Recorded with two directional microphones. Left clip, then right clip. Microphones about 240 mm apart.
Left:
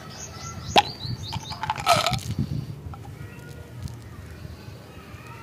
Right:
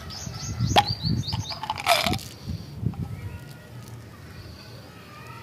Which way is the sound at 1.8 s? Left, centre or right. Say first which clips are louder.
Left 1 dB; centre.